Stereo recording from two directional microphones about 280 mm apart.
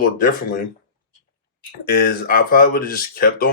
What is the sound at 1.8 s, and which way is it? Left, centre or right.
Speech, left.